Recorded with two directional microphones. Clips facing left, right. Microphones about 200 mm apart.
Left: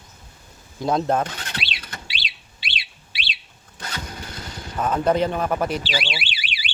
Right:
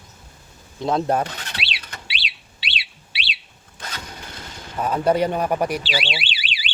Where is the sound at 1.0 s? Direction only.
10° right (ahead or behind).